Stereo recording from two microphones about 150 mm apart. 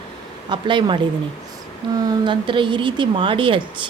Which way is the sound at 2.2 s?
35° right (ahead or behind).